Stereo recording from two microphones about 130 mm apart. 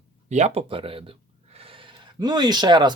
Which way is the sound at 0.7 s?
45° right (ahead or behind).